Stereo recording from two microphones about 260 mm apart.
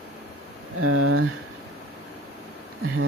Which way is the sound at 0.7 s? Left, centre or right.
Right.